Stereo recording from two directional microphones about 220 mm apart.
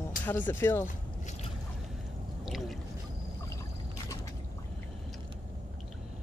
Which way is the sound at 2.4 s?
Centre (ahead or behind).